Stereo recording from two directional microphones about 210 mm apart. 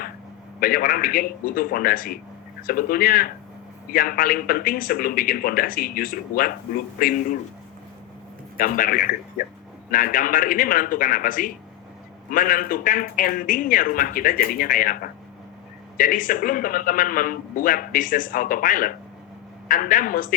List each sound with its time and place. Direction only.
0.6 s a man's voice: 45° left (ahead or behind)
8.5 s speech: 40° left (ahead or behind)
16.0 s speech: 40° left (ahead or behind)